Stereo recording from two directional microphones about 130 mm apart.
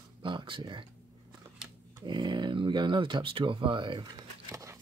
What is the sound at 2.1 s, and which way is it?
Speech, 35° right (ahead or behind).